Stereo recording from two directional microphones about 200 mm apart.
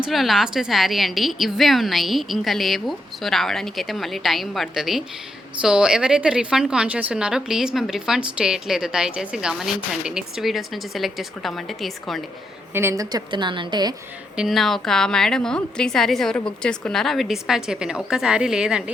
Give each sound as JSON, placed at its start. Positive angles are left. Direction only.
{"t": 0.0, "sound": "speech", "side_deg": 0}
{"t": 12.7, "sound": "a woman's voice", "side_deg": -15}
{"t": 14.3, "sound": "speech", "side_deg": 0}